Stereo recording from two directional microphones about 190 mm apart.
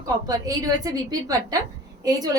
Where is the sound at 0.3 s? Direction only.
20° right (ahead or behind).